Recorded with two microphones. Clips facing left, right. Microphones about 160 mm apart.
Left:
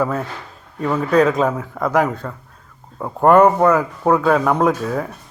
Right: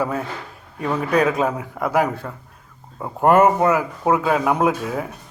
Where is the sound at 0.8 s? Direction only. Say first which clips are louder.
Left 4 dB; 30° left (ahead or behind).